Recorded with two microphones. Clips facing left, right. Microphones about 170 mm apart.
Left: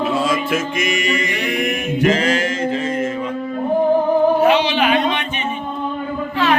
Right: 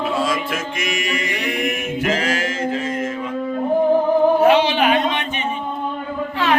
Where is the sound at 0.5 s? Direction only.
Centre (ahead or behind).